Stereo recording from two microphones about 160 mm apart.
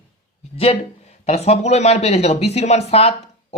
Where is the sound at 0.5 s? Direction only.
40° left (ahead or behind).